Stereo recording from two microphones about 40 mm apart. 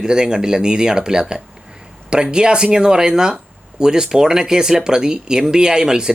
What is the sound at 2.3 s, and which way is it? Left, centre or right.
Speech, right.